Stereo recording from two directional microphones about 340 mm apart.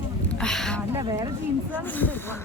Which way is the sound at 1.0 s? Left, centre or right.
Centre.